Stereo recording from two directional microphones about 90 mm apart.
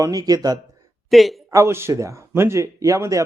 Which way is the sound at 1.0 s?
Centre (ahead or behind).